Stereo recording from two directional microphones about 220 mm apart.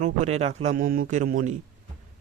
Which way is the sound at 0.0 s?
30° right (ahead or behind).